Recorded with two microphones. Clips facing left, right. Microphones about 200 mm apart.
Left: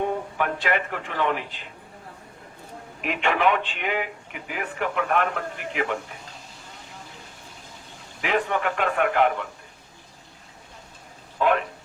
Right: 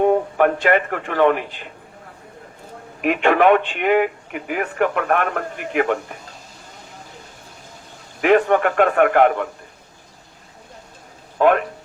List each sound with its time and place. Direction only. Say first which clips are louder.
0.0 s speech: right 10 dB; 50° right (ahead or behind)
3.0 s speech: right 7 dB; 50° right (ahead or behind)
8.2 s speech: right 10 dB; 55° right (ahead or behind)
11.3 s a man's voice: right 6 dB; 55° right (ahead or behind)